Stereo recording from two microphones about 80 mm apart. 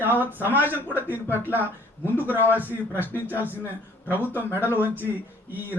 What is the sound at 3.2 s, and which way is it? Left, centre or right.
Speech, right.